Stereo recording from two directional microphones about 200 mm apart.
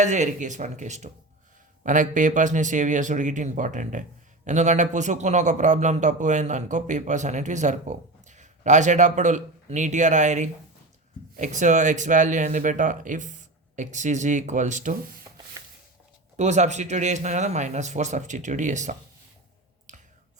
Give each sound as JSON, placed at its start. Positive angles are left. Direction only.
{"t": 0.0, "sound": "speech", "side_deg": -35}
{"t": 16.4, "sound": "speech", "side_deg": -35}
{"t": 19.9, "sound": "clicking", "side_deg": -40}